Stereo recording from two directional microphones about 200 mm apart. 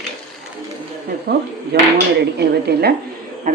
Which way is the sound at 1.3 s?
50° right (ahead or behind).